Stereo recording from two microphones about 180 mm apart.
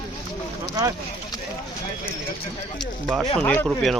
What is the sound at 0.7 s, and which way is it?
Speech, 20° right (ahead or behind).